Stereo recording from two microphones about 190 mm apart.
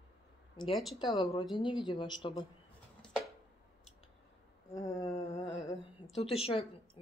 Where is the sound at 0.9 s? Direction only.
25° left (ahead or behind).